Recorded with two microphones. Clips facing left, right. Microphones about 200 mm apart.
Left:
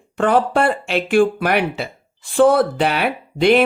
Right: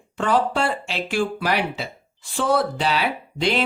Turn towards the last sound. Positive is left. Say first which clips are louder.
# left 8 dB
turn(degrees=55)  # may be behind; listen again after turning